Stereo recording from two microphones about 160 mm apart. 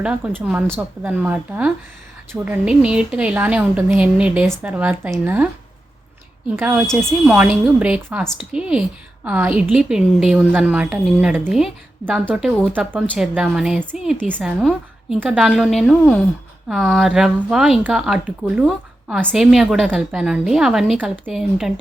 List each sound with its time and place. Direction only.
0.0 s a woman's voice: 10° right (ahead or behind)
7.0 s a woman's voice: 10° right (ahead or behind)